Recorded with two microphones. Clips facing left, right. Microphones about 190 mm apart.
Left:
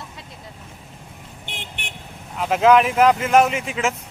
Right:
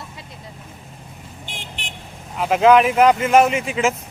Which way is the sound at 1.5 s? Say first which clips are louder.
Left 1 dB; 60° left (ahead or behind).